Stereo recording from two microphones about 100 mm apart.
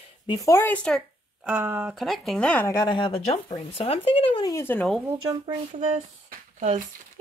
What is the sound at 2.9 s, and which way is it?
Speech, 60° left (ahead or behind).